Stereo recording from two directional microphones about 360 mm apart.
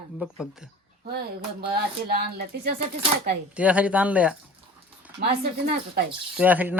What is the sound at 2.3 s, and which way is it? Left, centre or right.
Speech, right.